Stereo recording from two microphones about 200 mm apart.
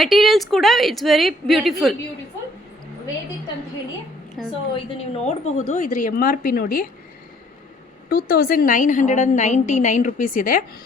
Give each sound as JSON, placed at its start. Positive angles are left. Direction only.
{"t": 0.0, "sound": "a woman's voice", "side_deg": 0}
{"t": 4.4, "sound": "a woman's voice", "side_deg": 0}
{"t": 4.7, "sound": "a woman's voice", "side_deg": 30}
{"t": 8.1, "sound": "a woman's voice", "side_deg": 50}